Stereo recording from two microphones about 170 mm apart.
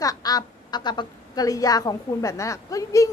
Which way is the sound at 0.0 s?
20° left (ahead or behind).